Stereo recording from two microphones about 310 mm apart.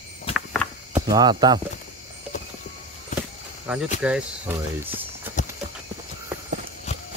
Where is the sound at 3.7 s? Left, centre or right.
Centre.